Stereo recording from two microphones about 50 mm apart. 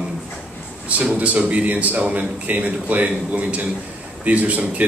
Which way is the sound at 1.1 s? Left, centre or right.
Right.